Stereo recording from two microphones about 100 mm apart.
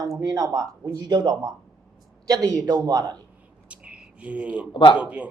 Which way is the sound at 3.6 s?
10° right (ahead or behind).